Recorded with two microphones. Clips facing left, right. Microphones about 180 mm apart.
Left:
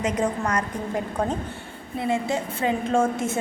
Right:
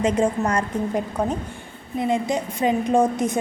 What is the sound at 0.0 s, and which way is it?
A woman's voice, 30° right (ahead or behind).